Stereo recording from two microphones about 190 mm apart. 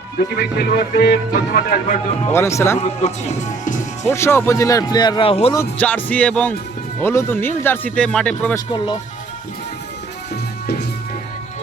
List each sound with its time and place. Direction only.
0.2 s speech: 55° left (ahead or behind)
2.3 s speech: 15° left (ahead or behind)
3.0 s speech: 40° left (ahead or behind)
4.0 s speech: 15° left (ahead or behind)
5.7 s speech: 10° left (ahead or behind)
8.5 s speech: 20° left (ahead or behind)